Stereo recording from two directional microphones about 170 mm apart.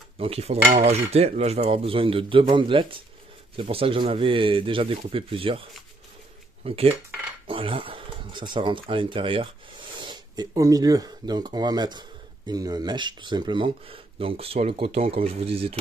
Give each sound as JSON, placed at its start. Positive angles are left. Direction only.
{"t": 0.2, "sound": "speech", "side_deg": -35}